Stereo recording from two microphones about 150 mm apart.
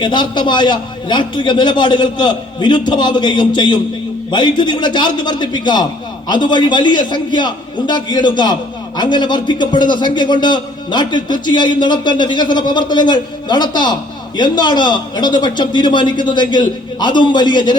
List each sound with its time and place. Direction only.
0.0 s a man's voice: 30° left (ahead or behind)